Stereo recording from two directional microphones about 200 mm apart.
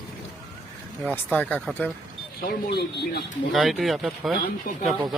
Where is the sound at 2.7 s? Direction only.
55° left (ahead or behind).